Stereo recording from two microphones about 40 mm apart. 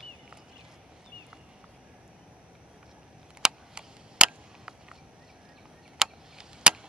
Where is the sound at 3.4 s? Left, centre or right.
Centre.